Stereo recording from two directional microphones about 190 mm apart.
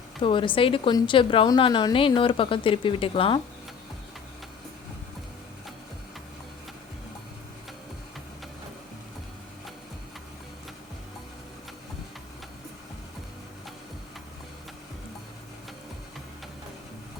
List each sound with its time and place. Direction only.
0.2 s a woman's voice: 25° left (ahead or behind)